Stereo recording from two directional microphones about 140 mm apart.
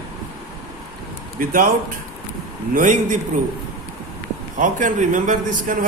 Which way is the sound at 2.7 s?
65° right (ahead or behind).